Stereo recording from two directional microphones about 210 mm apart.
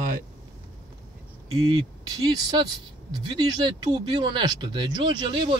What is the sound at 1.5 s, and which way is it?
Speech, 20° right (ahead or behind).